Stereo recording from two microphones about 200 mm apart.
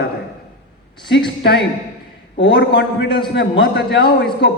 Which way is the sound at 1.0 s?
55° left (ahead or behind).